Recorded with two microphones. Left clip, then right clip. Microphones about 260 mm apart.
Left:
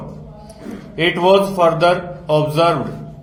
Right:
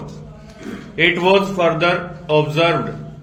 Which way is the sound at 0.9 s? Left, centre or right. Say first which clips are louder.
Left 1 dB; left.